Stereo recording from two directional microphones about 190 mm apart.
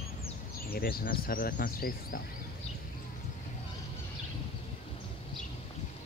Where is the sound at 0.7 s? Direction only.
50° left (ahead or behind).